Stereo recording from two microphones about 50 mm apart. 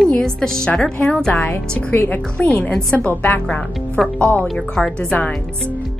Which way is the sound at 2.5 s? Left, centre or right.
Left.